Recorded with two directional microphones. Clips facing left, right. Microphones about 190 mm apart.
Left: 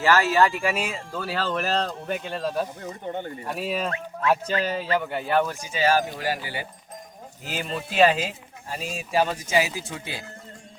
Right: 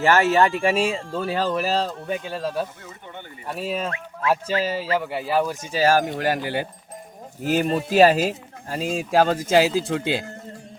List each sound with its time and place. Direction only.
0.0 s speech: 25° right (ahead or behind); by 2.6 s centre (ahead or behind)
2.8 s speech: 40° left (ahead or behind)
3.4 s speech: centre (ahead or behind)
5.5 s speech: 45° right (ahead or behind)
7.4 s speech: 45° right (ahead or behind)
8.7 s speech: 75° right (ahead or behind)